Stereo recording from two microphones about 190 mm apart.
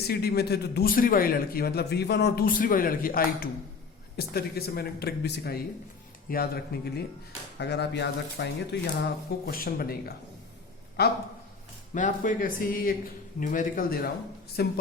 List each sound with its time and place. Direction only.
0.1 s a man's voice: 55° left (ahead or behind)
9.5 s a man's voice: 50° left (ahead or behind)
11.9 s a man's voice: 40° left (ahead or behind); by 14.7 s 55° left (ahead or behind)